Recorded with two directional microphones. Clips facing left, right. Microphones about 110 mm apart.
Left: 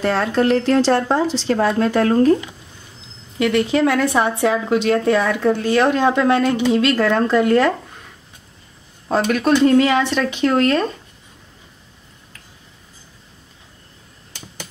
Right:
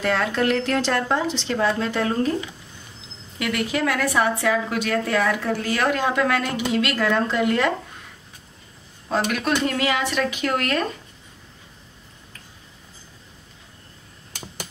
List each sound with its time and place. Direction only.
0.0 s speech: 35° left (ahead or behind); by 2.3 s 50° left (ahead or behind)
3.3 s speech: 30° left (ahead or behind)
9.1 s speech: 35° left (ahead or behind)